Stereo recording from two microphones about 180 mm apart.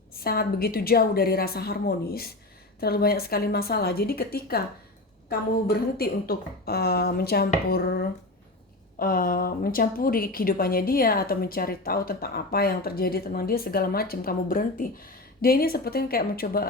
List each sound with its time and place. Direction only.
0.1 s a woman's voice: 60° left (ahead or behind)